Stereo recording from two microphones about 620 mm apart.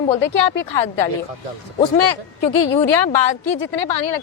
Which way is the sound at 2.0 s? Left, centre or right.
Left.